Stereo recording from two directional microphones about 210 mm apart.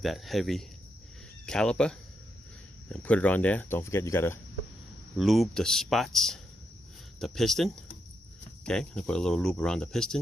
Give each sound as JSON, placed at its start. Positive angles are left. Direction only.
{"t": 0.0, "sound": "speech", "side_deg": 0}
{"t": 5.1, "sound": "speech", "side_deg": 0}